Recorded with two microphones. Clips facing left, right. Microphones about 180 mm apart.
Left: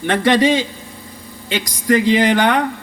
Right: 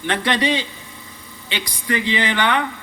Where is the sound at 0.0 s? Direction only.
45° left (ahead or behind).